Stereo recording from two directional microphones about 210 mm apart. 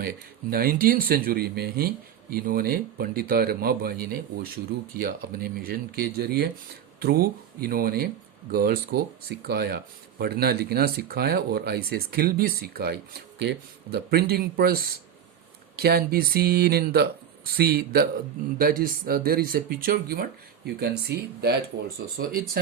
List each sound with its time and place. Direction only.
0.5 s speech: 45° right (ahead or behind)